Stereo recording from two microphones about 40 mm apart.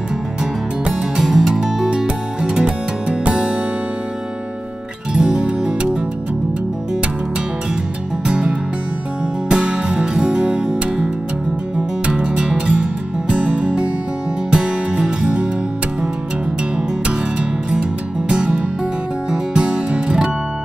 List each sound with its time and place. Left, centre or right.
1.2 s music: centre
2.6 s music: right
5.1 s music: right
8.3 s music: right
12.1 s music: right
18.3 s music: right